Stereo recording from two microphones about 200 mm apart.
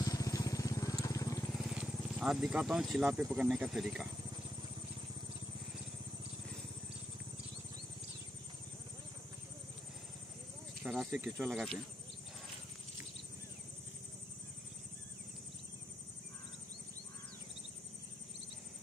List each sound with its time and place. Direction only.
0.0 s vehicle: 20° left (ahead or behind)
1.5 s vehicle: centre (ahead or behind)
3.3 s speech: centre (ahead or behind)
10.8 s speech: centre (ahead or behind)